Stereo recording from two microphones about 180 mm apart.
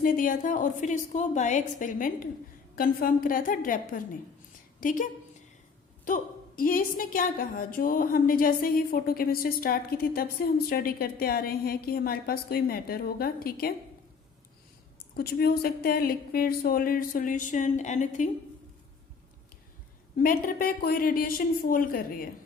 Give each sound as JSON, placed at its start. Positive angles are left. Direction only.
{"t": 0.0, "sound": "a woman's voice", "side_deg": 50}
{"t": 6.6, "sound": "a woman's voice", "side_deg": 50}
{"t": 15.1, "sound": "speech", "side_deg": 60}
{"t": 20.1, "sound": "speech", "side_deg": 50}